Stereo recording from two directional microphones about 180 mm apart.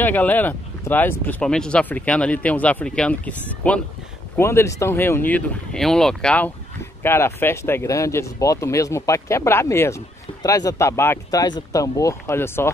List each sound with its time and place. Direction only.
0.0 s speech: 10° left (ahead or behind)